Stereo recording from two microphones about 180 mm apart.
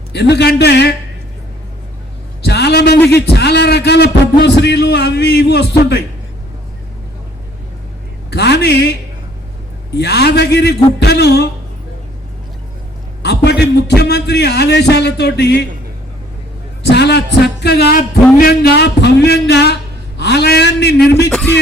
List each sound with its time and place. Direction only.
0.1 s a man's voice: 70° left (ahead or behind)
2.4 s a sound: 65° left (ahead or behind)
3.1 s a man's voice: 65° left (ahead or behind)
8.3 s a man's voice: 70° left (ahead or behind)
13.2 s a man's voice: 70° left (ahead or behind)
16.9 s music: 65° left (ahead or behind)
18.3 s a man's voice: 60° left (ahead or behind)
21.2 s a sound: 5° left (ahead or behind)